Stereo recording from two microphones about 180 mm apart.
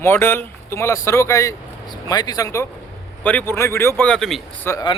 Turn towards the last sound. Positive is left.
turn(degrees=15)  # may be behind; listen again after turning